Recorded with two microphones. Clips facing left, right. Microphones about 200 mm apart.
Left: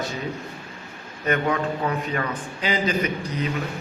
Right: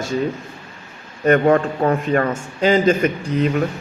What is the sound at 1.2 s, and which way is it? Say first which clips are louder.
Speech: right 9 dB; 50° right (ahead or behind).